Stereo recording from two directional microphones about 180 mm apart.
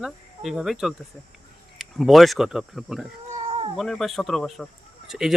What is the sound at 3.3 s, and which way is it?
Cat, 40° right (ahead or behind).